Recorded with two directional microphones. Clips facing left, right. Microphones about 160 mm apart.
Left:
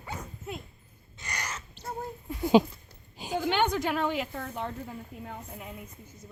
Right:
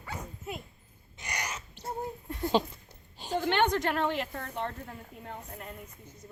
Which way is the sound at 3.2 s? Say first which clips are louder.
Even; 5° left (ahead or behind).